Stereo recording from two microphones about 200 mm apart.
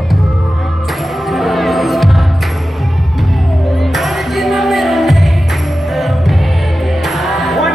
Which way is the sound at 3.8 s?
Centre (ahead or behind).